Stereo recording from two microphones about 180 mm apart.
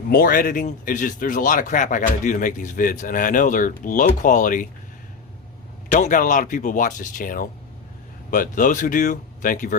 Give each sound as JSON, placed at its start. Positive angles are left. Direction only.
{"t": 0.1, "sound": "speech", "side_deg": 50}
{"t": 5.9, "sound": "speech", "side_deg": 45}